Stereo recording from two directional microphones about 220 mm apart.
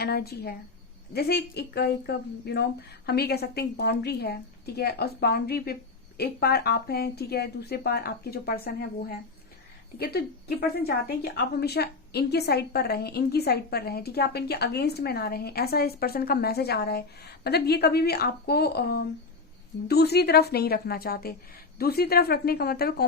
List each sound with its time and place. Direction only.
0.0 s a woman's voice: 45° left (ahead or behind)